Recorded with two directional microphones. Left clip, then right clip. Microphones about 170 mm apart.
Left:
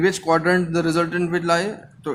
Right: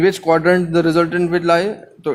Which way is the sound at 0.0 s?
30° right (ahead or behind).